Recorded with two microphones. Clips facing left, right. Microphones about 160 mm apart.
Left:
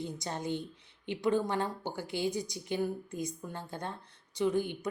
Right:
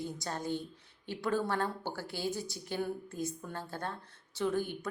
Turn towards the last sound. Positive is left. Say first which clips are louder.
# left 3 dB
turn(degrees=15)  # may be behind; listen again after turning